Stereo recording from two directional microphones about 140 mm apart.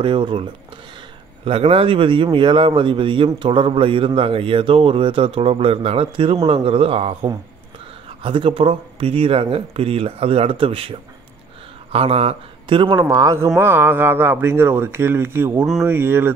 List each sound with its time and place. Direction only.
0.0 s a man's voice: 35° right (ahead or behind)
13.0 s speech: 25° right (ahead or behind)